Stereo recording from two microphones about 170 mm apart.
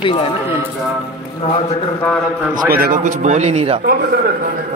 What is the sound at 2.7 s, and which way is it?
Speech, 55° right (ahead or behind).